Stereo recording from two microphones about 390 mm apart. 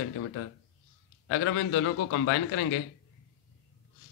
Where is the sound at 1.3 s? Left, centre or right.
Left.